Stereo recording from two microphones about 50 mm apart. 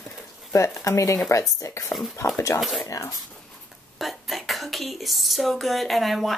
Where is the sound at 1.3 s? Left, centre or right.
Left.